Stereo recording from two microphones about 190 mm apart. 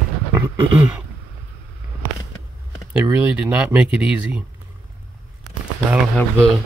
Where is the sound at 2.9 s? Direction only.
10° right (ahead or behind).